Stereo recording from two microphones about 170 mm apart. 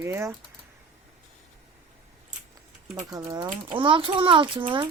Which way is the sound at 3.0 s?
20° right (ahead or behind).